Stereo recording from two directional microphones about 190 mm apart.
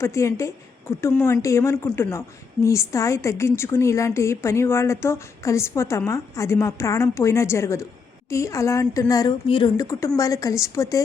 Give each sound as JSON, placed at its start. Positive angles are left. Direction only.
{"t": 0.0, "sound": "a woman's voice", "side_deg": 15}